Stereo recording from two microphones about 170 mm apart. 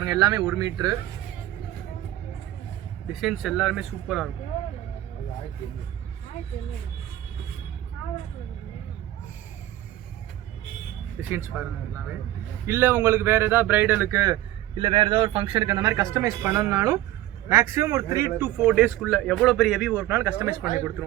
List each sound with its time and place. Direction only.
0.0 s speech: 20° right (ahead or behind)
3.1 s speech: centre (ahead or behind)
11.2 s speech: 10° right (ahead or behind)
14.8 s speech: 30° right (ahead or behind)